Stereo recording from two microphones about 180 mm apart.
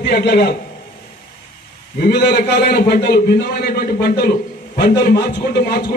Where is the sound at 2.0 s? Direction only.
65° left (ahead or behind).